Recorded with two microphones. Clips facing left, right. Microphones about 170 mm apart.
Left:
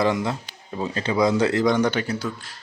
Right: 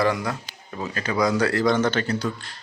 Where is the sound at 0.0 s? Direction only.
20° left (ahead or behind).